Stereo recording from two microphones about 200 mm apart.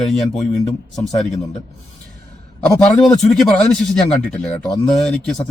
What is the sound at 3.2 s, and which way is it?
Speech, 5° left (ahead or behind).